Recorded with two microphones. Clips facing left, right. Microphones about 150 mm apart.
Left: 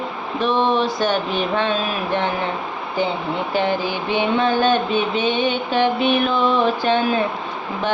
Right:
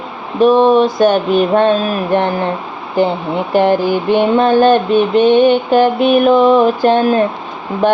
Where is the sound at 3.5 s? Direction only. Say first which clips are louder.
Right 10 dB; 50° right (ahead or behind).